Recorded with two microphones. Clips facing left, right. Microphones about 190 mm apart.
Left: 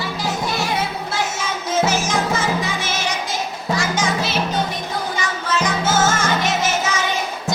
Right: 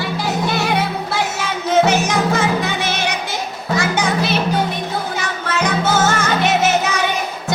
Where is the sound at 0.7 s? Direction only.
65° right (ahead or behind).